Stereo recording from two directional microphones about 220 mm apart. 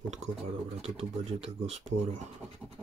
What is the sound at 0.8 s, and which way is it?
Speech, 30° right (ahead or behind).